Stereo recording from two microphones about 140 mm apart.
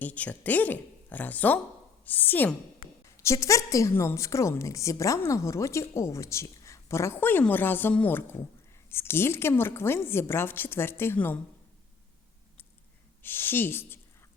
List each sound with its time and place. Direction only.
0.0 s a woman's voice: 10° left (ahead or behind)
2.8 s a sound: 80° left
3.2 s a woman's voice: 20° left (ahead or behind)
13.2 s speech: 15° left (ahead or behind)